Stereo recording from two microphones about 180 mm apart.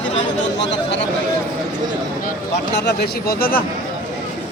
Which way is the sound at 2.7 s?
65° left (ahead or behind).